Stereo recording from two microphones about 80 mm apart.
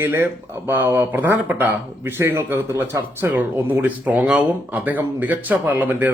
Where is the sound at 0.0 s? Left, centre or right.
Right.